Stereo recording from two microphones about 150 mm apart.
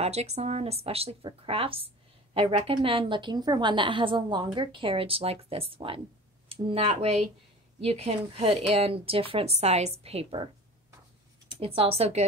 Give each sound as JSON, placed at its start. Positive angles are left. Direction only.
{"t": 0.0, "sound": "a woman's voice", "side_deg": -45}
{"t": 11.6, "sound": "a woman's voice", "side_deg": -40}